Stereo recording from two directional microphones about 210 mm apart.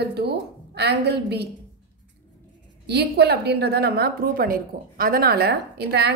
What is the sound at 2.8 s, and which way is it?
A woman's voice, 50° right (ahead or behind).